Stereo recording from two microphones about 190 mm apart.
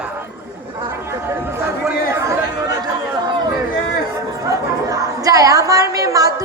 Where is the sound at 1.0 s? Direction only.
10° right (ahead or behind).